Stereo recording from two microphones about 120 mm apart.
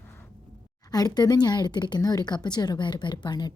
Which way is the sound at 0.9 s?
30° left (ahead or behind).